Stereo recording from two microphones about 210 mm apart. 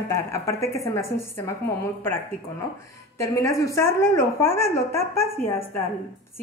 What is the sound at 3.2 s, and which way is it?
A woman's voice, 15° left (ahead or behind).